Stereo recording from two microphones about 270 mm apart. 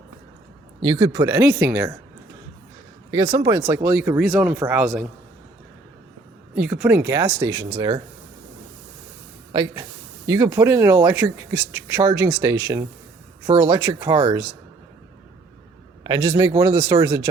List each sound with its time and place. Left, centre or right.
0.8 s speech: centre
3.1 s speech: centre
6.6 s speech: centre
9.5 s speech: centre
16.0 s speech: centre